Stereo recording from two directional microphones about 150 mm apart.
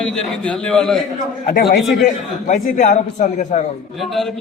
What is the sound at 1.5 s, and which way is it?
Speech, 90° left.